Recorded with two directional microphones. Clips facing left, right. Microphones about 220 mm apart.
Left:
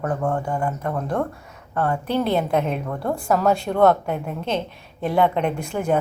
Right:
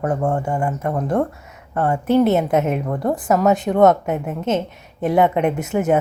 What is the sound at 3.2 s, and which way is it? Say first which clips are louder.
Speech: right 3 dB; 5° right (ahead or behind).